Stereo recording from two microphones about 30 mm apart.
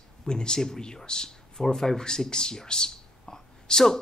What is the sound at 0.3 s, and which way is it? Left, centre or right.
Speech, left.